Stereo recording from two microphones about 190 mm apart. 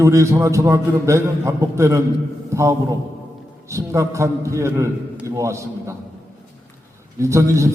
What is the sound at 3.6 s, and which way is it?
A man's voice, 15° right (ahead or behind).